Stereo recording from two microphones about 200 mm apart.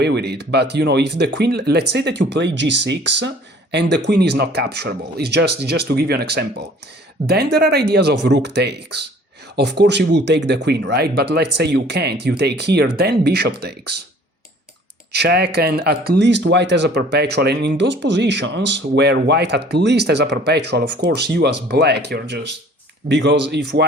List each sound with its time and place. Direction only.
0.0 s speech: 55° right (ahead or behind)
15.1 s speech: 55° right (ahead or behind)